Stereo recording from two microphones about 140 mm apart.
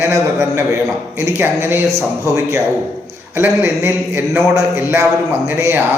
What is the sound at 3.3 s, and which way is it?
Mantra, 15° right (ahead or behind).